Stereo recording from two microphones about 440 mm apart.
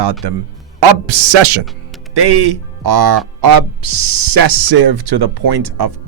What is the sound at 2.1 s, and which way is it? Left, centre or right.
Speech, right.